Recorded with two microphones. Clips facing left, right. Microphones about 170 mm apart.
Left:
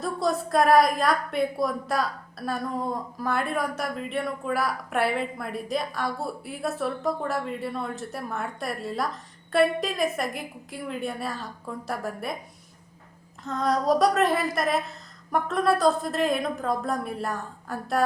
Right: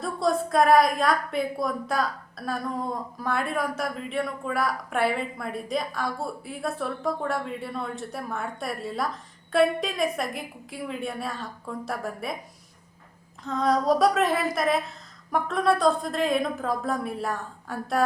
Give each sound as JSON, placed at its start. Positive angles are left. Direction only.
{"t": 0.0, "sound": "a woman's voice", "side_deg": 0}
{"t": 13.4, "sound": "a woman's voice", "side_deg": 0}